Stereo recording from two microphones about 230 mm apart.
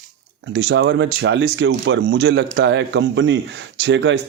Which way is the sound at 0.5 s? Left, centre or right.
Right.